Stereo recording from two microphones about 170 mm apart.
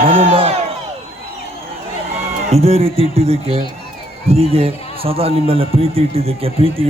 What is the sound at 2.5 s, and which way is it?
A man's voice, 35° right (ahead or behind).